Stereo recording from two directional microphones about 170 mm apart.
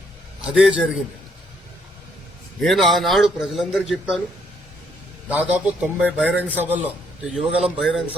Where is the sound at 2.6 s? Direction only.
Centre (ahead or behind).